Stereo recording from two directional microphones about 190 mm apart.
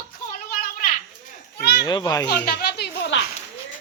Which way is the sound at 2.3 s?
55° left (ahead or behind).